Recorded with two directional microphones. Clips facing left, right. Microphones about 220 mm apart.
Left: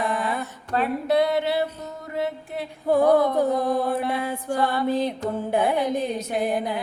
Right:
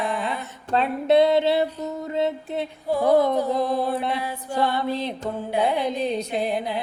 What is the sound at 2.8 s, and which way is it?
Music, 50° left (ahead or behind).